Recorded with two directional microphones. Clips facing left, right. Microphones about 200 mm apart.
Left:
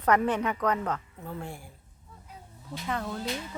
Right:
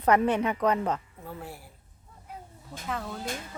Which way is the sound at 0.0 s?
25° right (ahead or behind).